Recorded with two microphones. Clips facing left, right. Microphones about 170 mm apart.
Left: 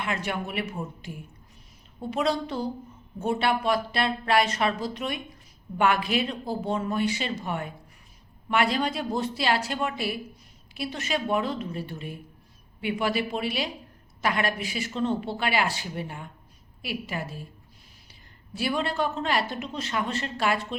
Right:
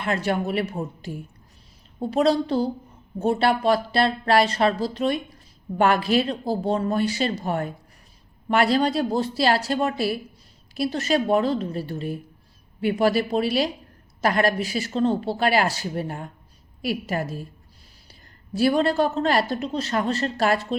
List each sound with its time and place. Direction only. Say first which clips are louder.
0.0 s a woman's voice: right 6 dB; 35° right (ahead or behind)